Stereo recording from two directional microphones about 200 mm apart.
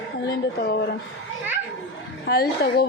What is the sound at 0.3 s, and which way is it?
Speech, 55° left (ahead or behind).